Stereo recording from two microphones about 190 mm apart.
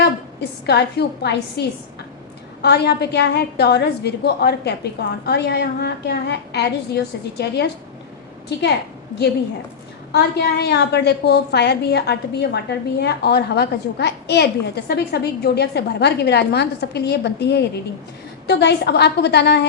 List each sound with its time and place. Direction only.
0.0 s a woman's voice: 60° left (ahead or behind)
10.1 s a woman's voice: 60° left (ahead or behind)